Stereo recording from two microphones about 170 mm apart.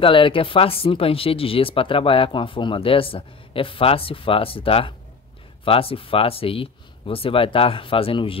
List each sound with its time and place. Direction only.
0.0 s speech: 30° left (ahead or behind)